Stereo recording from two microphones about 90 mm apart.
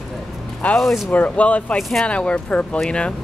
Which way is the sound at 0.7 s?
Centre (ahead or behind).